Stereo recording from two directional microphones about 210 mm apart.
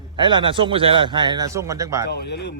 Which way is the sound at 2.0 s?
50° left (ahead or behind).